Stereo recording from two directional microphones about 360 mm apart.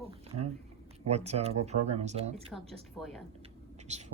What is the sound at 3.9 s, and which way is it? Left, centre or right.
Speech, centre.